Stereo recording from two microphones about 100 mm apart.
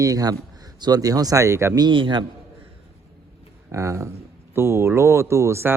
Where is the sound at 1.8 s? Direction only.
50° right (ahead or behind).